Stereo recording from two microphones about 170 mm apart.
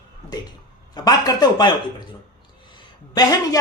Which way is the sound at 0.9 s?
25° left (ahead or behind).